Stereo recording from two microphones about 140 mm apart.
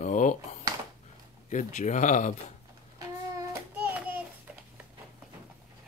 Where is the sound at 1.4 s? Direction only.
60° left (ahead or behind).